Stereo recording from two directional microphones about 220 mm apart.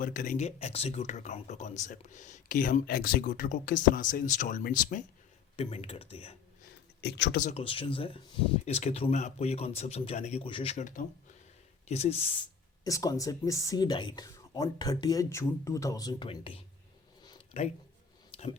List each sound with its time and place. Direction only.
0.0 s speech: 35° left (ahead or behind)
7.0 s speech: 50° left (ahead or behind)
7.4 s speech: 25° left (ahead or behind)
17.2 s a sound: 30° left (ahead or behind)